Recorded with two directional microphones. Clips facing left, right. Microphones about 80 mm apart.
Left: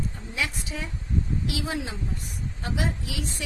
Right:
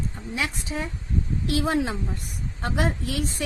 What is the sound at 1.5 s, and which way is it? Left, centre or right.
A woman's voice, right.